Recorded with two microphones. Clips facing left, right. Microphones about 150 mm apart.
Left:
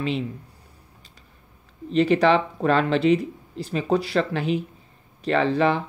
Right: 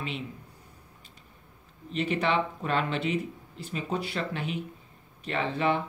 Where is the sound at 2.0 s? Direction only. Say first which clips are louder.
Left 9 dB; 90° left.